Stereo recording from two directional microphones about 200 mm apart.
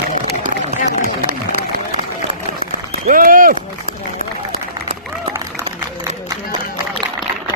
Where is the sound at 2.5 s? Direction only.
40° right (ahead or behind).